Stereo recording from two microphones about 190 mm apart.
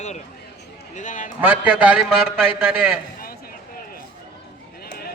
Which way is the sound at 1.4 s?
5° right (ahead or behind).